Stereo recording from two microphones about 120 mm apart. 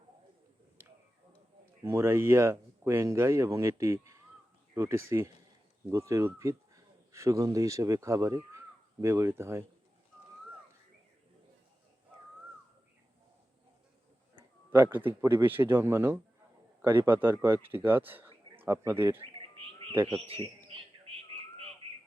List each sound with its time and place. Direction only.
1.8 s speech: 20° right (ahead or behind)
14.7 s speech: 20° right (ahead or behind)
19.2 s bird: 50° right (ahead or behind)